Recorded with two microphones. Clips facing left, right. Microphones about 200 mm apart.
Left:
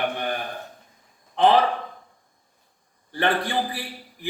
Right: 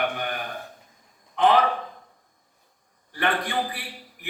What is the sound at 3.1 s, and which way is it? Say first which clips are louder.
Speech: left 3 dB; 30° left (ahead or behind).